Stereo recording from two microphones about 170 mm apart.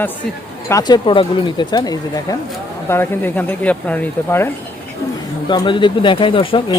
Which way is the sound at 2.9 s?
10° left (ahead or behind).